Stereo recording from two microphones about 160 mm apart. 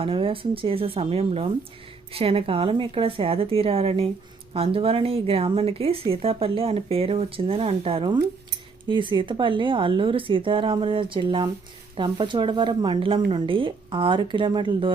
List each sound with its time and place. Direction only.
0.0 s speech: 35° right (ahead or behind)